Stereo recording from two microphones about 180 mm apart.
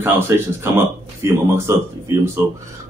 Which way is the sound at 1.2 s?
15° right (ahead or behind).